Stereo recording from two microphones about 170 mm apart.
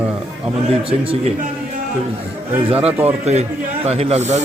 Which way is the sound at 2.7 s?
35° right (ahead or behind).